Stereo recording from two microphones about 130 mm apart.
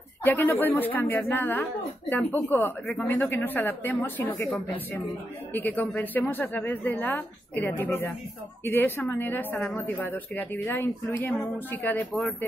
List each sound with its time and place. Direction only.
0.2 s a woman's voice: 15° left (ahead or behind)
5.5 s a woman's voice: 15° left (ahead or behind)
12.1 s speech: 5° left (ahead or behind)